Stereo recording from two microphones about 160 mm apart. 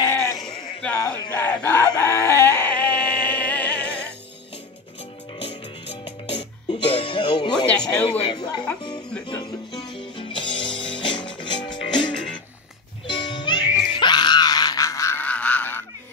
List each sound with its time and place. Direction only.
0.0 s bleat: 20° left (ahead or behind)
1.5 s chicken: 10° left (ahead or behind)
6.7 s music: 35° left (ahead or behind)
7.5 s a sound: 5° left (ahead or behind)
8.3 s music: 25° left (ahead or behind)
9.9 s music: 30° left (ahead or behind); by 15.8 s 10° left (ahead or behind)